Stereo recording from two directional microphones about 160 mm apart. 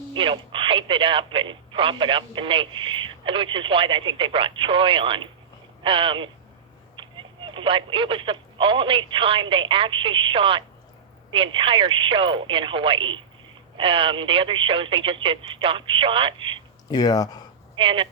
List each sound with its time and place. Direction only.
0.1 s speech: 30° right (ahead or behind)
16.9 s speech: 25° left (ahead or behind)
17.7 s speech: 30° right (ahead or behind)